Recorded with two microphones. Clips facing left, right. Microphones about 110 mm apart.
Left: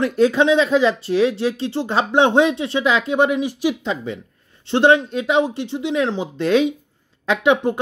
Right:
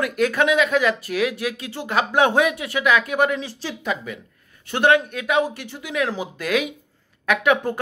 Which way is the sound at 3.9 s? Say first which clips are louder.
Left 2 dB; 25° left (ahead or behind).